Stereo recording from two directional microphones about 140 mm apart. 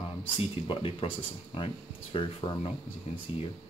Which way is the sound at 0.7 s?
40° left (ahead or behind).